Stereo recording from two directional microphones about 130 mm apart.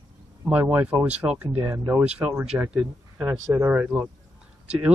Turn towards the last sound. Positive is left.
turn(degrees=-10)  # may be behind; listen again after turning